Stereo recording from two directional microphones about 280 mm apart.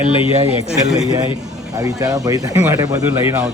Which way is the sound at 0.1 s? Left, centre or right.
Centre.